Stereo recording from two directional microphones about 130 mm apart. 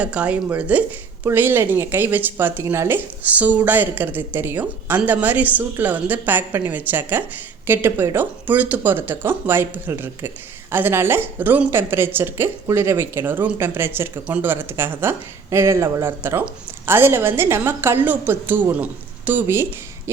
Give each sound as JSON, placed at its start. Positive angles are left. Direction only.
{"t": 0.0, "sound": "speech", "side_deg": -10}